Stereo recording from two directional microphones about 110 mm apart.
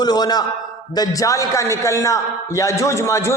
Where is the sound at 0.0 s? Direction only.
40° left (ahead or behind).